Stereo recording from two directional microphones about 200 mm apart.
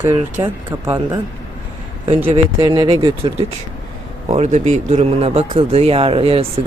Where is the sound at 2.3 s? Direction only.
20° right (ahead or behind).